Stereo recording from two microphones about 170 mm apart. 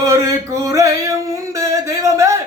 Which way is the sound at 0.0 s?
20° right (ahead or behind).